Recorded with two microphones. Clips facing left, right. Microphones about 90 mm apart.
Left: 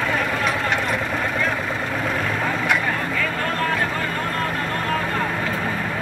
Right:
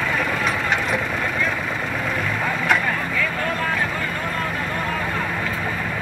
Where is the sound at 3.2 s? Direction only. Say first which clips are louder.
Even; 45° left (ahead or behind).